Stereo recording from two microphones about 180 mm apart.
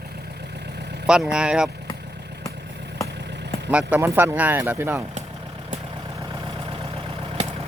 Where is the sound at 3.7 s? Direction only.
5° right (ahead or behind).